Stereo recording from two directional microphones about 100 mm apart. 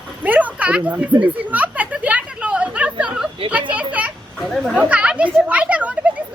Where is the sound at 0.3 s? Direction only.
15° right (ahead or behind).